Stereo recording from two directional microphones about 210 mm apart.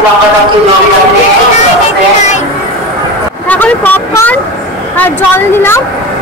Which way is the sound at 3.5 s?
10° left (ahead or behind).